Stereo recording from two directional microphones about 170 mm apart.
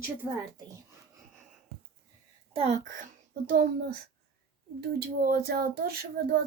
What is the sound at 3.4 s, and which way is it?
Speech, 55° right (ahead or behind).